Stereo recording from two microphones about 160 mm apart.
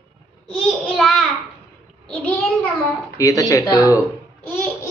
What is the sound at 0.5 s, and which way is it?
Child singing, 5° left (ahead or behind).